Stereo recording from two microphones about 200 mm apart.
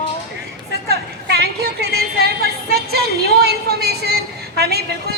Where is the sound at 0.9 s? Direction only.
55° right (ahead or behind).